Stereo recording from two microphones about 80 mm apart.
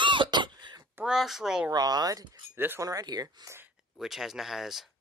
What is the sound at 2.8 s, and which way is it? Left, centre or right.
Speech, right.